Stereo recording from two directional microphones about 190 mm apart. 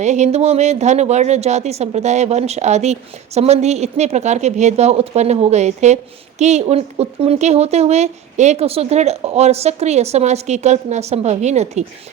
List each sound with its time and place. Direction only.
0.0 s speech: 35° right (ahead or behind)